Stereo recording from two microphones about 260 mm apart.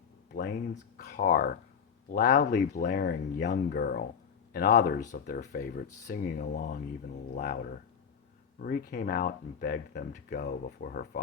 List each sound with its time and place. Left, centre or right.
0.3 s speech: left
2.4 s speech: left
8.6 s speech: left